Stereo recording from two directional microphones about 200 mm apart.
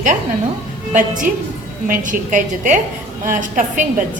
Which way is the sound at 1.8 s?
40° right (ahead or behind).